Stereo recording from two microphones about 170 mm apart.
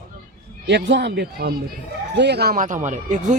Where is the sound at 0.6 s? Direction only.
90° right; by 3.4 s 45° right (ahead or behind).